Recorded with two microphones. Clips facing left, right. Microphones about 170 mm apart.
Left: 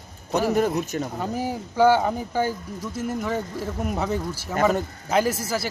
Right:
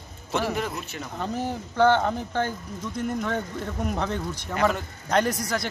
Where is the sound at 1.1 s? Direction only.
10° left (ahead or behind).